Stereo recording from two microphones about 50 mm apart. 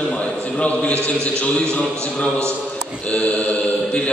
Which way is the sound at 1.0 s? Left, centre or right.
Left.